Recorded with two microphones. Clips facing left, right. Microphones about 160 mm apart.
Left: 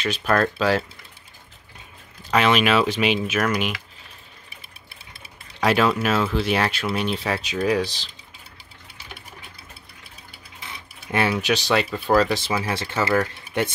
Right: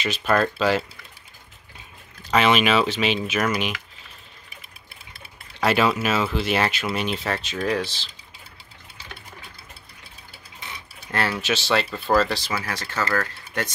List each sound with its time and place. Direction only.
0.1 s speech: centre (ahead or behind)
2.3 s speech: centre (ahead or behind)
5.6 s speech: 5° right (ahead or behind)
11.1 s speech: 15° left (ahead or behind)
11.7 s speech: 5° left (ahead or behind)
12.4 s speech: 25° left (ahead or behind)